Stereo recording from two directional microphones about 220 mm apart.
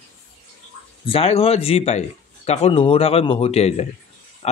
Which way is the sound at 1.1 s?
25° left (ahead or behind).